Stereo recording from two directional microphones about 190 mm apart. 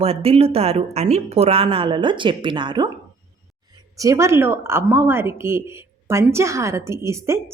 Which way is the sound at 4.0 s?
15° right (ahead or behind).